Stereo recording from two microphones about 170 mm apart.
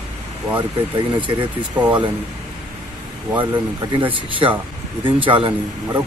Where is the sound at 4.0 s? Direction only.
30° right (ahead or behind).